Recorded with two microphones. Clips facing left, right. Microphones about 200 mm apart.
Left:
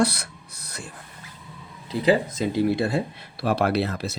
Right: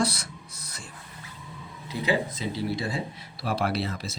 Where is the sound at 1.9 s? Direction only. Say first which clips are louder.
Left 6 dB; 45° left (ahead or behind).